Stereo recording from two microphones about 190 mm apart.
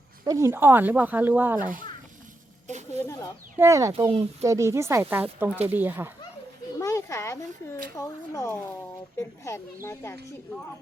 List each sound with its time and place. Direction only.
0.3 s speech: 15° right (ahead or behind)
2.6 s a sound: 40° right (ahead or behind)
3.0 s speech: 15° left (ahead or behind)
3.6 s speech: 15° right (ahead or behind)
6.7 s a sound: 15° left (ahead or behind)
7.9 s speech: 15° left (ahead or behind)